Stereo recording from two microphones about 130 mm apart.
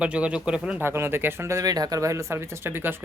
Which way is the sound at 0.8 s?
20° right (ahead or behind).